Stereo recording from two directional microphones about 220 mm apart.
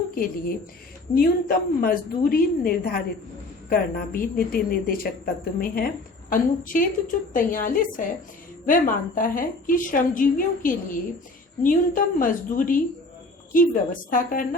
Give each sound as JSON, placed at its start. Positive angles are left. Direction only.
{"t": 0.1, "sound": "a woman's voice", "side_deg": 40}